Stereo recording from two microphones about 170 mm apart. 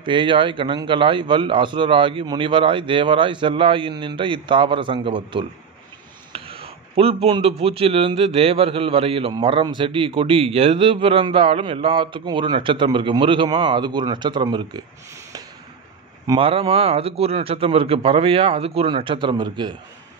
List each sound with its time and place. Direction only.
0.0 s a man's voice: 30° right (ahead or behind)
16.3 s a man's voice: 30° right (ahead or behind)